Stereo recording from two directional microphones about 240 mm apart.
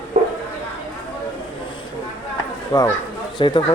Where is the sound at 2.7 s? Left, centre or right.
Centre.